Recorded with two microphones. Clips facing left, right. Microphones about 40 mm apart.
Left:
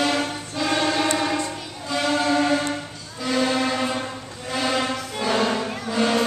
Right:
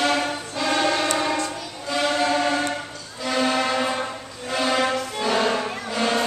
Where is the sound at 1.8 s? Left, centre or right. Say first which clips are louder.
Even; centre.